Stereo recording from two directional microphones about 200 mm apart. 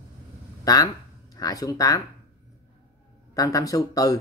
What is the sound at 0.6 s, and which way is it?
Speech, 20° left (ahead or behind).